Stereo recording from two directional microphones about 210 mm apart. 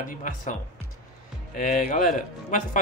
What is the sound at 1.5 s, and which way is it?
Speech, 35° left (ahead or behind).